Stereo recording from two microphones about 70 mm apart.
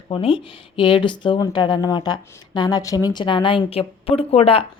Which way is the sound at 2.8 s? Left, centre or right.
Left.